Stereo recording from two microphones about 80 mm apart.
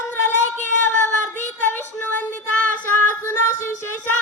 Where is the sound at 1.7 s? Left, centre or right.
Centre.